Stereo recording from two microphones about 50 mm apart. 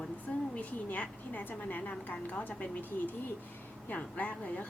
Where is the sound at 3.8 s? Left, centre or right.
Left.